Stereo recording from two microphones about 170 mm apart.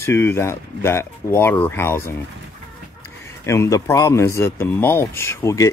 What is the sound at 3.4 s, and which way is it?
Speech, 20° left (ahead or behind).